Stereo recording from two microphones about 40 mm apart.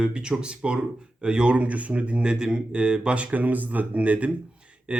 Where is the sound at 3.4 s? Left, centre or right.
Right.